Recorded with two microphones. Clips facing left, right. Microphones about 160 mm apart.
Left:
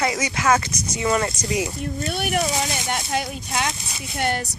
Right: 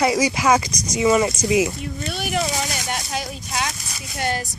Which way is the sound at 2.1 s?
60° left (ahead or behind).